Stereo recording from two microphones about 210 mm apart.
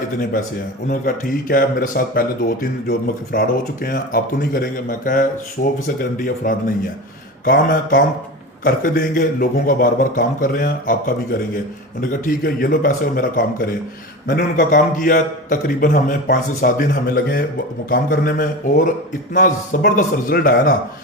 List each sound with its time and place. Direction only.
0.9 s a man's voice: 40° left (ahead or behind)